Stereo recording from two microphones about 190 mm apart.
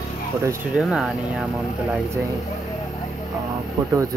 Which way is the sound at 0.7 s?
Centre (ahead or behind).